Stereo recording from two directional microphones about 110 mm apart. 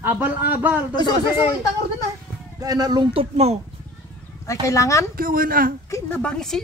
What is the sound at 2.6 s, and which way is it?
Speech, 35° right (ahead or behind).